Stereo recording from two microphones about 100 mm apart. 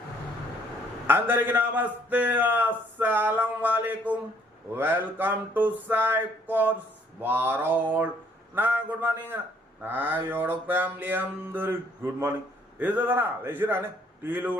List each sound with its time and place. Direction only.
1.0 s a man's voice: 20° right (ahead or behind)